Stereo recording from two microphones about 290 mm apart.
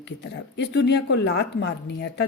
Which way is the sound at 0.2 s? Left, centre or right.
Left.